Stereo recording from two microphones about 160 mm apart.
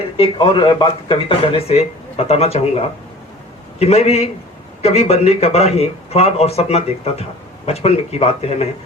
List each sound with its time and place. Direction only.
0.2 s a man's voice: 35° left (ahead or behind)